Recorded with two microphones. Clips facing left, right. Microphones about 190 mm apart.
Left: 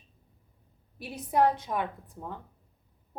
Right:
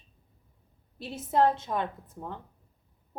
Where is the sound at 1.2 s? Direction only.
15° left (ahead or behind).